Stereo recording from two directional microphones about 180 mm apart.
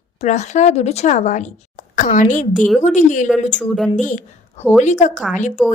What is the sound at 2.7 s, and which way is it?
A woman's voice, 45° left (ahead or behind).